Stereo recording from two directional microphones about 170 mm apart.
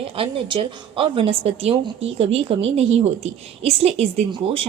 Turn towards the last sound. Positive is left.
turn(degrees=-35)  # may be behind; listen again after turning